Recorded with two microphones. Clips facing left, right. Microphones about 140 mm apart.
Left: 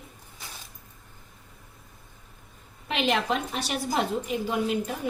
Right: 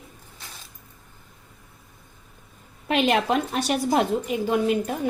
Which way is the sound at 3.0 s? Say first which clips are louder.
Right 2 dB; 50° right (ahead or behind).